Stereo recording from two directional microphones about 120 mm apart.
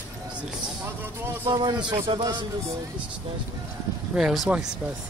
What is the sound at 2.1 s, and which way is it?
Speech, 40° right (ahead or behind).